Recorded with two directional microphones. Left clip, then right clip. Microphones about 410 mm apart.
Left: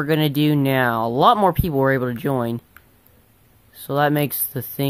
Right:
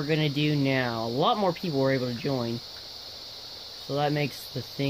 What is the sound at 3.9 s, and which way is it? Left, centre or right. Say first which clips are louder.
Speech: left 8 dB; centre.